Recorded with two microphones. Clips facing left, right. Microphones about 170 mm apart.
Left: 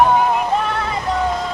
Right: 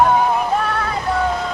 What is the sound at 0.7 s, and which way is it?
Vehicle, 20° left (ahead or behind).